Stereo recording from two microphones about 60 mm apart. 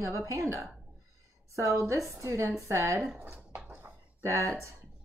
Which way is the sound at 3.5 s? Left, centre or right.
Right.